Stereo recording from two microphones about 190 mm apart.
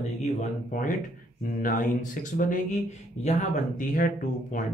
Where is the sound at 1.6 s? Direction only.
45° left (ahead or behind).